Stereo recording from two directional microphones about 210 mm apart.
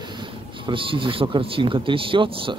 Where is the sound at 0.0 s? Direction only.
20° right (ahead or behind).